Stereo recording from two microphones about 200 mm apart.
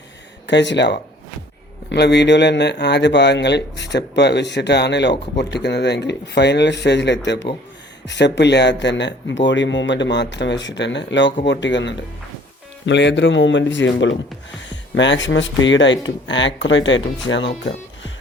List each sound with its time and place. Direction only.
0.4 s speech: 60° left (ahead or behind)